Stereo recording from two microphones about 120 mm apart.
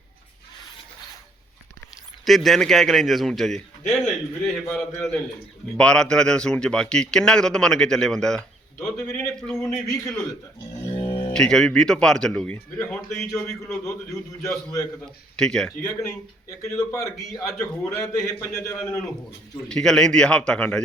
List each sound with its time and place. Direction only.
2.2 s speech: centre (ahead or behind)
5.7 s speech: 5° left (ahead or behind)
9.0 s a man's voice: 20° left (ahead or behind)
10.9 s music: 45° left (ahead or behind)
11.3 s speech: 5° left (ahead or behind)
13.1 s speech: 5° left (ahead or behind)
14.4 s a man's voice: 30° left (ahead or behind)
15.4 s speech: 5° left (ahead or behind)
15.8 s a man's voice: 25° left (ahead or behind)
19.6 s speech: 5° left (ahead or behind)